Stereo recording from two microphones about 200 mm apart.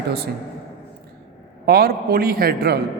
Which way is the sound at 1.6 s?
50° right (ahead or behind).